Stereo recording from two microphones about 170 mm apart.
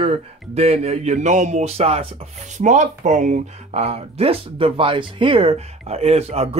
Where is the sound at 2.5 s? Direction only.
45° right (ahead or behind).